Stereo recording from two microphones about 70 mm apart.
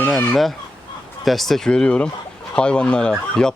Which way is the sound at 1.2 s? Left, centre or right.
Centre.